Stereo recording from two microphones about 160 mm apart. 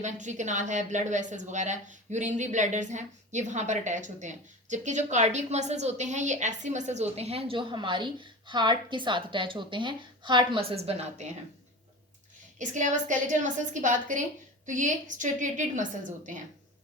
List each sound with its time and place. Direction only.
0.0 s a woman's voice: 50° right (ahead or behind)
12.5 s a woman's voice: 50° right (ahead or behind)